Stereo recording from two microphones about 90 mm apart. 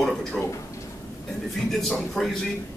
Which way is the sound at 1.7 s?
5° left (ahead or behind).